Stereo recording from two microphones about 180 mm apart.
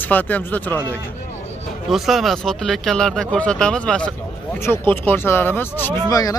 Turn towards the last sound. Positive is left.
turn(degrees=20)  # may be behind; listen again after turning